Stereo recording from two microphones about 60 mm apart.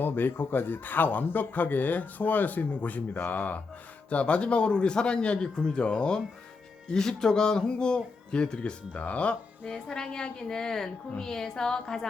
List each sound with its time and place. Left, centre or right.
0.0 s speech: left
9.6 s speech: centre